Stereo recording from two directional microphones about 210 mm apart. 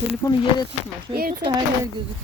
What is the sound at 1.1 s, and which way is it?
Speech, 45° right (ahead or behind).